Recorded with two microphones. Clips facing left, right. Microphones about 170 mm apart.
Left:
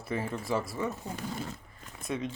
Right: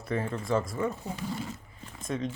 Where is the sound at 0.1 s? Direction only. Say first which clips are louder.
Right 3 dB; 5° left (ahead or behind).